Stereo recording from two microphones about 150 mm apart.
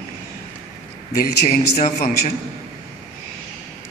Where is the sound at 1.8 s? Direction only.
60° left (ahead or behind).